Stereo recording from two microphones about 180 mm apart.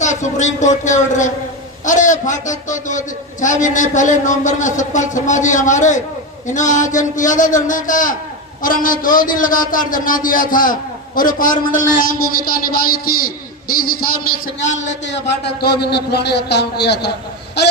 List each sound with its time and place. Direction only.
0.0 s a woman's voice: 40° left (ahead or behind)
15.0 s a man's voice: 75° left (ahead or behind)